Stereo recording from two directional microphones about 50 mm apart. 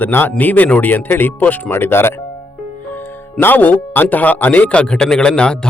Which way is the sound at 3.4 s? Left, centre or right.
Left.